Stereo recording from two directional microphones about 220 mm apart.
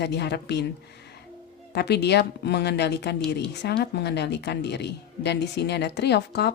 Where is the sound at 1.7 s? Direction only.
50° left (ahead or behind).